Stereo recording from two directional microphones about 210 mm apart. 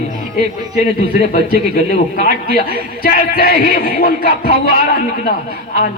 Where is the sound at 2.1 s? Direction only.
40° left (ahead or behind).